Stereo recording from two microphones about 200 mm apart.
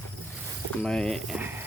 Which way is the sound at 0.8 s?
5° left (ahead or behind).